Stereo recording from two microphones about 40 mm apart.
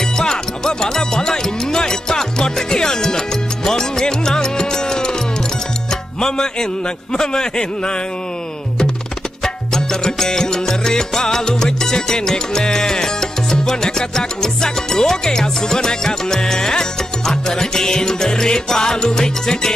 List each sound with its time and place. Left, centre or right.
0.2 s music: centre
6.2 s music: centre
9.4 s music: centre